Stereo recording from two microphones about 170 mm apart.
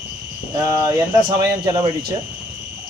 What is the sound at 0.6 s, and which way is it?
Speech, 20° right (ahead or behind).